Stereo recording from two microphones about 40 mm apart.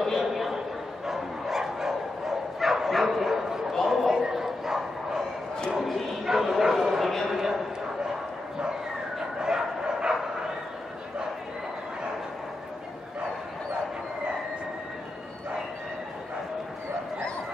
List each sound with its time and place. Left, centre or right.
0.2 s a sound: centre
1.0 s bow-wow: centre
5.9 s bow-wow: centre
6.2 s bow-wow: centre
7.3 s a sound: centre
9.4 s bow-wow: centre